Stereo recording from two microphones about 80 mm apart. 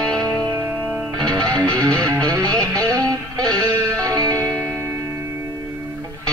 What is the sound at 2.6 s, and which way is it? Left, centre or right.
Music, right.